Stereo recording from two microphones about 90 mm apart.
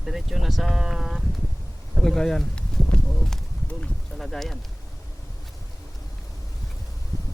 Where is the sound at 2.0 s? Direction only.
5° left (ahead or behind).